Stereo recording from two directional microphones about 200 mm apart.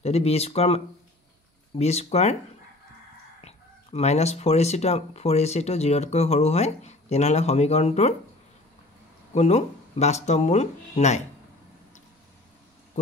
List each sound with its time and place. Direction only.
0.0 s speech: 30° left (ahead or behind)
3.3 s speech: 30° left (ahead or behind)
9.3 s speech: 35° left (ahead or behind)